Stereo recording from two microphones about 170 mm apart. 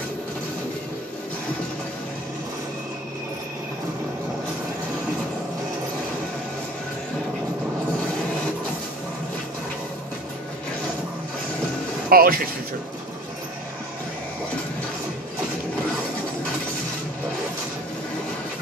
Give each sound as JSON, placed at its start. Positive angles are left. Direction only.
{"t": 12.1, "sound": "speech", "side_deg": -60}